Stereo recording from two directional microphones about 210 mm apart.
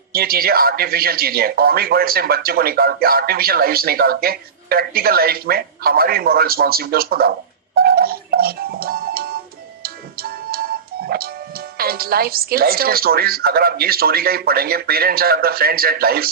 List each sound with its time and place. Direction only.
0.1 s speech: 45° right (ahead or behind)
7.8 s music: 45° right (ahead or behind)